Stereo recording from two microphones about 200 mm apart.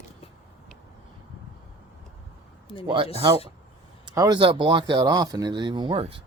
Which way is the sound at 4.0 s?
20° right (ahead or behind).